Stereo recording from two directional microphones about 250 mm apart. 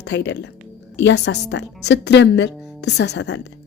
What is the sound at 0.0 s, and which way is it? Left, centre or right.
A woman's voice, left.